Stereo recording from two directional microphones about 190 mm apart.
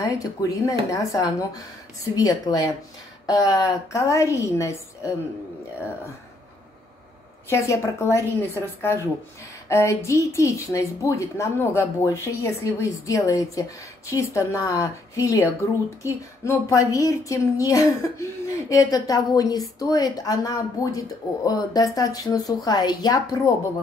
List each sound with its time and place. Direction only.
0.0 s a woman's voice: 15° left (ahead or behind)
7.4 s a woman's voice: 15° left (ahead or behind)